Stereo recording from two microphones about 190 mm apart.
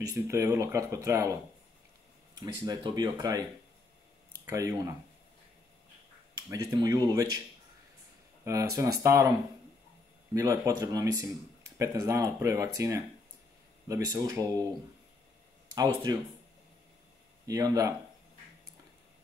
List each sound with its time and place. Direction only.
0.1 s speech: 15° right (ahead or behind)
4.5 s speech: 15° right (ahead or behind)
6.5 s speech: 15° right (ahead or behind)
8.5 s speech: 15° right (ahead or behind)
10.3 s speech: 15° right (ahead or behind)
15.7 s speech: 20° right (ahead or behind)
17.5 s speech: 20° right (ahead or behind)